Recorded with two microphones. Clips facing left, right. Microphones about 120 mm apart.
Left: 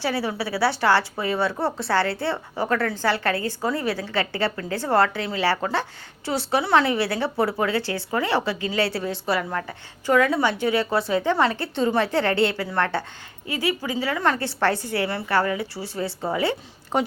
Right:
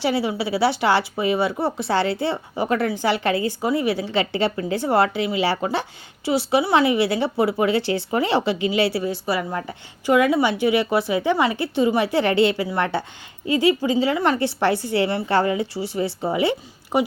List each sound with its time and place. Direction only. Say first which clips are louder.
0.0 s speech: right 3 dB; 15° right (ahead or behind)
9.6 s a woman's voice: right 1 dB; 15° right (ahead or behind)